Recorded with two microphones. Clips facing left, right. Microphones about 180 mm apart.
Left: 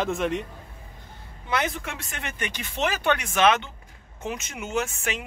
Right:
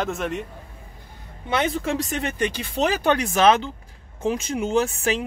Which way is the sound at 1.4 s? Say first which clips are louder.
Right 5 dB; 30° right (ahead or behind).